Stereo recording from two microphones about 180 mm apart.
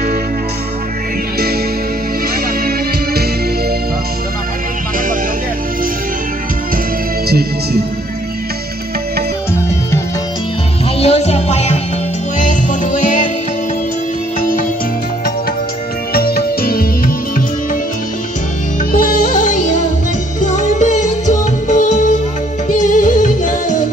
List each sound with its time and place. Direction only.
7.2 s music: 60° right (ahead or behind)
9.5 s music: 15° left (ahead or behind)
11.0 s music: 35° left (ahead or behind)
14.4 s music: 50° left (ahead or behind)
16.1 s music: 55° left (ahead or behind)
18.9 s music: 50° left (ahead or behind)